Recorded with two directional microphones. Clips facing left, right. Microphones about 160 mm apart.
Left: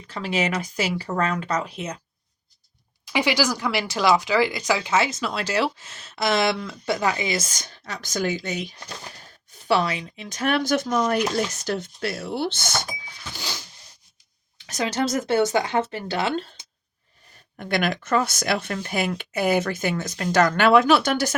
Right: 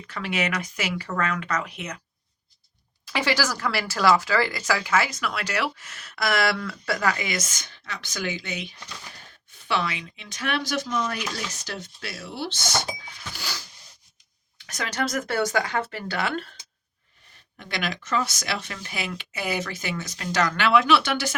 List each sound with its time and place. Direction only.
0.1 s speech: 30° left (ahead or behind)
3.0 s speech: 15° left (ahead or behind); by 12.6 s 55° left (ahead or behind)
13.3 s zipper: 20° left (ahead or behind)
14.7 s speech: 25° left (ahead or behind)
17.6 s speech: 55° left (ahead or behind)